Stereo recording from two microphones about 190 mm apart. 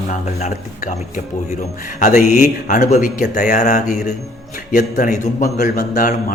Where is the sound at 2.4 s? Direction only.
50° left (ahead or behind).